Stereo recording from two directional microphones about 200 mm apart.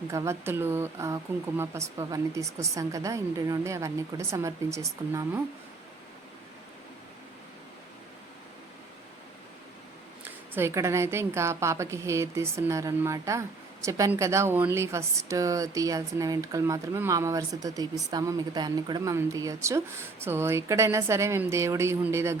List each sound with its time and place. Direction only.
0.1 s a woman's voice: 15° right (ahead or behind)
10.2 s a woman's voice: 10° right (ahead or behind)